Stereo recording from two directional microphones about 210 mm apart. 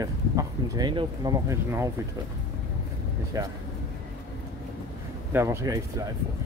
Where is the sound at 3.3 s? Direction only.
15° right (ahead or behind).